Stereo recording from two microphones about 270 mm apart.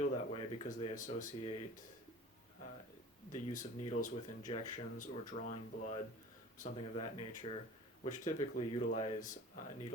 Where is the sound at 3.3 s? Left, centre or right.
Left.